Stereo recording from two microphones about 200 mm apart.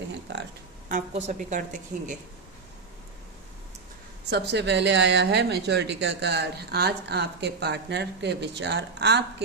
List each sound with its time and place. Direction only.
0.9 s a woman's voice: 40° right (ahead or behind)
4.3 s speech: 55° right (ahead or behind)